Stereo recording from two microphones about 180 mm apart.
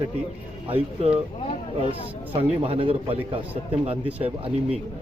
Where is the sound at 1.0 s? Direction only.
35° right (ahead or behind).